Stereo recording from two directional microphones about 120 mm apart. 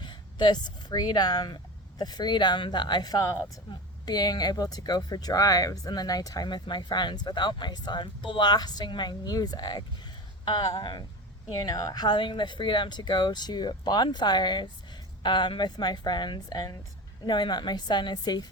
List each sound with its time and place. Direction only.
0.0 s speech: 40° left (ahead or behind)